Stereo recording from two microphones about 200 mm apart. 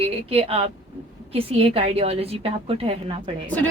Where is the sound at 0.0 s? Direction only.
30° right (ahead or behind).